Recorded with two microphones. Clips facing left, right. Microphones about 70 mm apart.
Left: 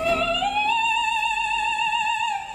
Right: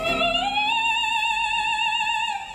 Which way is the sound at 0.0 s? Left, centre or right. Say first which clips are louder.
Left 1 dB; centre.